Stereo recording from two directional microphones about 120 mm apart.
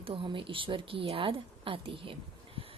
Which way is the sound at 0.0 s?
45° right (ahead or behind).